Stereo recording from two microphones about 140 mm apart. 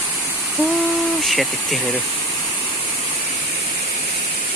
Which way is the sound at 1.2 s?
Centre (ahead or behind).